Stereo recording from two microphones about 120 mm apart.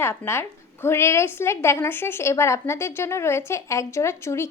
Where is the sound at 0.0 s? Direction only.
20° left (ahead or behind).